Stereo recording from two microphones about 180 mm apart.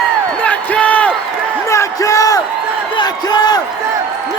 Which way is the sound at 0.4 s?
5° left (ahead or behind).